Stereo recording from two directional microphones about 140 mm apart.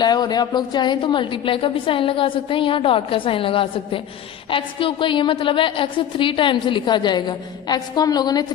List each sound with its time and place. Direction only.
0.0 s a woman's voice: 30° left (ahead or behind)